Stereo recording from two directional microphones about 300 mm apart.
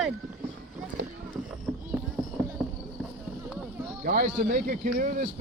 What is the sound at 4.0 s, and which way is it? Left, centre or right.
A man's voice, right.